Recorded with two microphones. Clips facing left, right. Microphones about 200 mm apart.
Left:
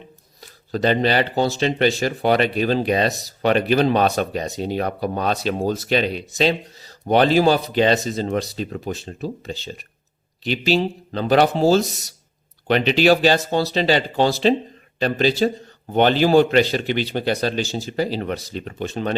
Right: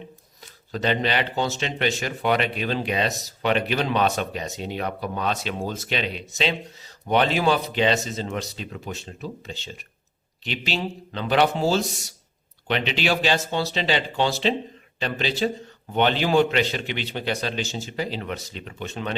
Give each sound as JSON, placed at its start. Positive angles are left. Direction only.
{"t": 0.7, "sound": "speech", "side_deg": 40}